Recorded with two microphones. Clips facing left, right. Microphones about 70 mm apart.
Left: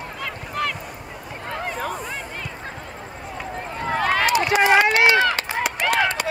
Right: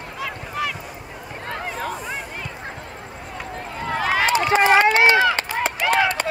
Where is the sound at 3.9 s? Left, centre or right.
Centre.